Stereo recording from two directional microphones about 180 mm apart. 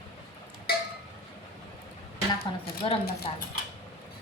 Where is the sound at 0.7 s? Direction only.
60° left (ahead or behind).